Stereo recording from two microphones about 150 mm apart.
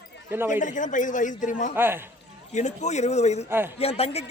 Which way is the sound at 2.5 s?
50° left (ahead or behind).